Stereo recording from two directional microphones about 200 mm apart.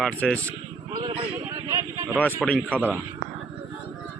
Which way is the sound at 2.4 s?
5° left (ahead or behind).